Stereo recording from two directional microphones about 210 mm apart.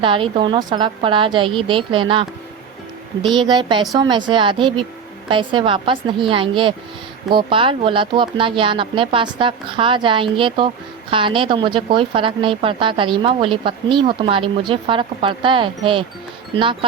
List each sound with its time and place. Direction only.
0.0 s speech: 25° right (ahead or behind)
3.2 s speech: 20° right (ahead or behind)